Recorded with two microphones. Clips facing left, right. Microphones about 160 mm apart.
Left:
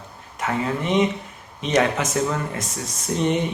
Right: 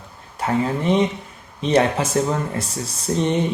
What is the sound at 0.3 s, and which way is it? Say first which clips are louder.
Speech: right 3 dB; 35° right (ahead or behind).